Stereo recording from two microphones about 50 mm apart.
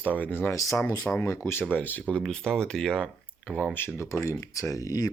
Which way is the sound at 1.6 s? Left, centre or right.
Left.